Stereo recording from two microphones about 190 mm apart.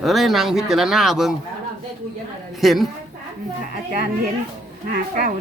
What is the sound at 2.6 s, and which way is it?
Speech, centre (ahead or behind).